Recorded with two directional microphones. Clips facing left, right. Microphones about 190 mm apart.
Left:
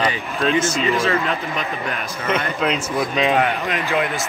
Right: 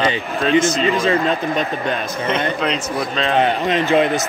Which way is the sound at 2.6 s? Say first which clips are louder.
Even; 5° left (ahead or behind).